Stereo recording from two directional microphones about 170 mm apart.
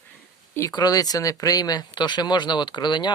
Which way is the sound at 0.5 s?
20° left (ahead or behind).